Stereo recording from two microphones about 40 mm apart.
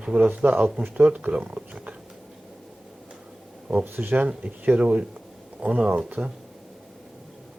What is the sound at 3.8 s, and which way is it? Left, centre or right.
Speech, right.